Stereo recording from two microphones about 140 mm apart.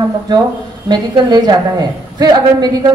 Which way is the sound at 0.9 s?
30° right (ahead or behind).